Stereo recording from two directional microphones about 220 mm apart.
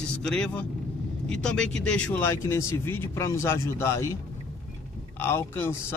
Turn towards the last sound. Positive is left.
turn(degrees=10)  # may be behind; listen again after turning